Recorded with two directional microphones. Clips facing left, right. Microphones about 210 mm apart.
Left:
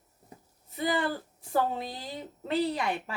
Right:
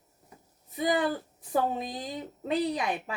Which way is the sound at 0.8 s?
15° right (ahead or behind).